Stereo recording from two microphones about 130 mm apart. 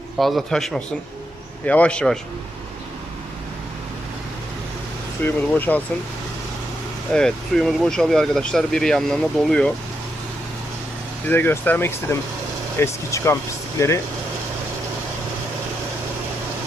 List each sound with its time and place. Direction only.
0.2 s speech: centre (ahead or behind)
5.2 s speech: 15° left (ahead or behind)
7.1 s speech: 5° left (ahead or behind)
11.3 s speech: 15° left (ahead or behind)